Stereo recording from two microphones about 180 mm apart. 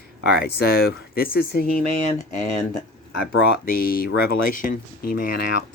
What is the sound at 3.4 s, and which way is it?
Speech, 60° left (ahead or behind).